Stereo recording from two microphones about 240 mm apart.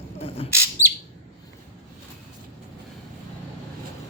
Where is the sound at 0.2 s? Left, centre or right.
Left.